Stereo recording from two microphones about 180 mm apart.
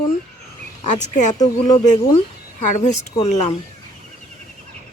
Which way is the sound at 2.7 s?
40° left (ahead or behind).